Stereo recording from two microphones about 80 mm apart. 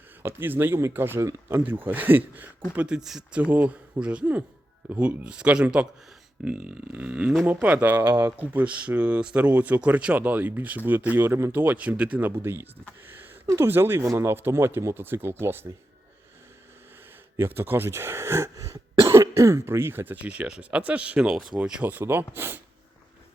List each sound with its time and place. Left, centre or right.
0.2 s speech: right
2.7 s speech: centre
11.3 s speech: right; by 12.3 s centre
12.3 s speech: right
17.3 s speech: right